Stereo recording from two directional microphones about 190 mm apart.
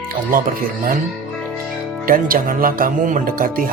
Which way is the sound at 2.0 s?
45° right (ahead or behind).